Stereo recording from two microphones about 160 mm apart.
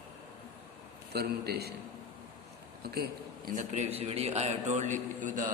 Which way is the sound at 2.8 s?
80° right.